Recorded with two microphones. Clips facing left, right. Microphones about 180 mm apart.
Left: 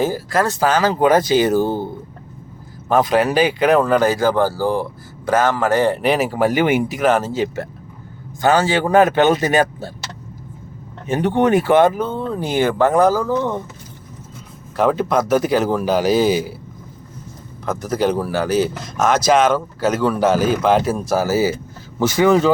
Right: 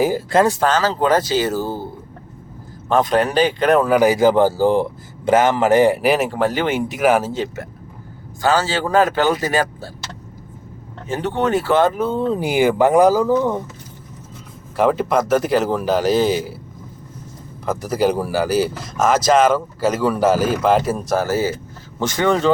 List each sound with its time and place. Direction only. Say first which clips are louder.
0.6 s speech: left 2 dB; 15° left (ahead or behind)
2.9 s speech: left 1 dB; 5° left (ahead or behind)
6.9 s speech: right 1 dB; 5° right (ahead or behind)
8.4 s speech: left 2 dB; 20° left (ahead or behind)
11.0 s speech: left 4 dB; 15° left (ahead or behind)
11.9 s speech: right 3 dB; 10° right (ahead or behind)
14.8 s speech: even; 5° right (ahead or behind)
17.7 s speech: right 1 dB; 5° right (ahead or behind)